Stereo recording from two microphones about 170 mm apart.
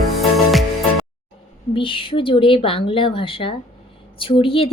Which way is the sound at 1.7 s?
30° left (ahead or behind).